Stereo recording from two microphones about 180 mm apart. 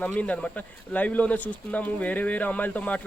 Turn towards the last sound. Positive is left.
turn(degrees=10)  # may be behind; listen again after turning